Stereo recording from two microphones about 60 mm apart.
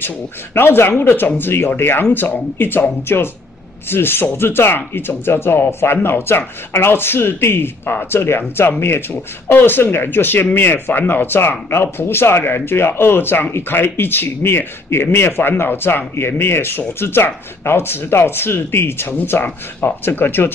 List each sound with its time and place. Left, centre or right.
0.6 s speech: left